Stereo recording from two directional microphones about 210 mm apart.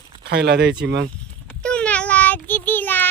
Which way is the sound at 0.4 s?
55° right (ahead or behind).